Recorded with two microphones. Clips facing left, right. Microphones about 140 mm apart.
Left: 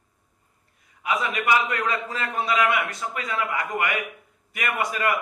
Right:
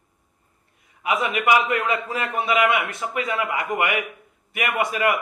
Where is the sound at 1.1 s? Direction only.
25° right (ahead or behind).